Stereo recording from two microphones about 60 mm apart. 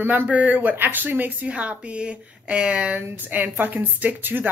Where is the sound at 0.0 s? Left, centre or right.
Right.